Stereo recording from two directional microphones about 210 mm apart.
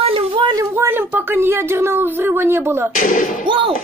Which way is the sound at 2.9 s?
40° left (ahead or behind).